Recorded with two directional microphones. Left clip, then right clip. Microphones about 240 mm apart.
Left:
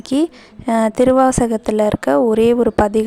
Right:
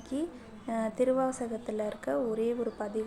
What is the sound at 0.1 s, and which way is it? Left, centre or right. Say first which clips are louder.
A woman's voice: left 17 dB; left.